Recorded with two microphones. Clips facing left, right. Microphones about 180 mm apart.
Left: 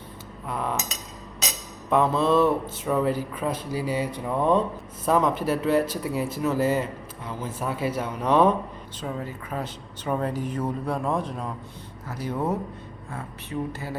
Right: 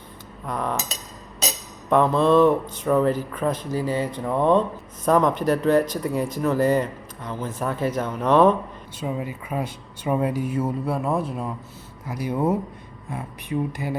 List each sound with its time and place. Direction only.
0.4 s speech: 5° left (ahead or behind)
1.9 s speech: 5° left (ahead or behind)
9.0 s speech: 10° right (ahead or behind)